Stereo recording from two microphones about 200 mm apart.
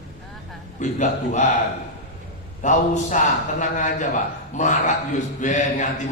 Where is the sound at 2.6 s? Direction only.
40° left (ahead or behind).